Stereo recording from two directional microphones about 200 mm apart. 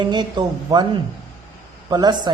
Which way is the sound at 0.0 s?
20° right (ahead or behind).